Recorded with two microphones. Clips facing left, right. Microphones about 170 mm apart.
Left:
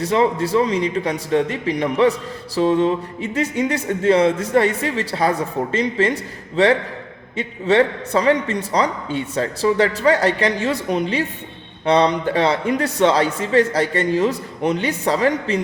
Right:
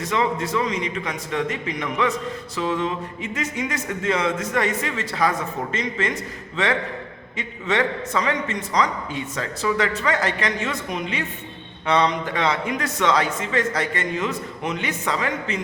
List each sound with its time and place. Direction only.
0.0 s a man's voice: 35° left (ahead or behind)
7.3 s a man's voice: 30° left (ahead or behind)